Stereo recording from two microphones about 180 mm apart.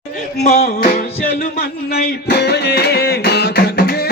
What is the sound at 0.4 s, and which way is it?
Music, 40° left (ahead or behind).